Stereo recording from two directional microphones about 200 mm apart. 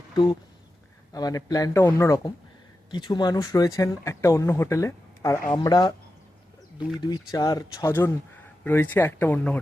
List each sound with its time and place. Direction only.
1.1 s speech: 20° left (ahead or behind)